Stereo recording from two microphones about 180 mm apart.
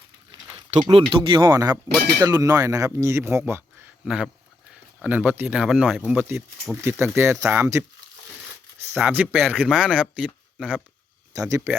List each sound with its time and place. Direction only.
0.8 s speech: 25° right (ahead or behind); by 10.8 s 5° right (ahead or behind)
11.3 s speech: 15° right (ahead or behind)